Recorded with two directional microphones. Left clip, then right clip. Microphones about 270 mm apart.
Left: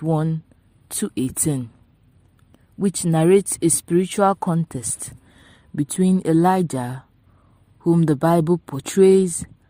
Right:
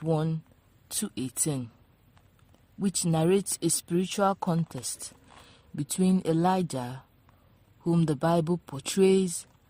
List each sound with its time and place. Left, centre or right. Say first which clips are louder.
0.0 s speech: left 6 dB; centre
2.8 s speech: left 8 dB; centre